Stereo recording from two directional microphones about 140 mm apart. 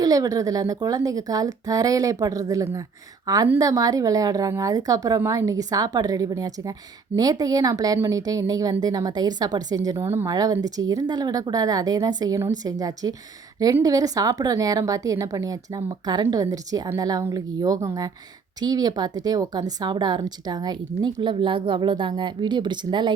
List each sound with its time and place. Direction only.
0.0 s a woman's voice: 25° right (ahead or behind)